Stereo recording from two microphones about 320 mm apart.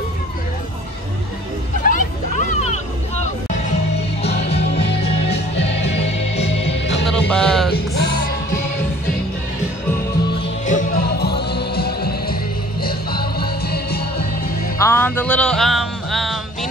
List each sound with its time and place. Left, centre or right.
1.9 s hubbub: left
4.2 s music: centre
7.2 s music: centre
7.7 s music: left
10.4 s music: left
14.8 s music: centre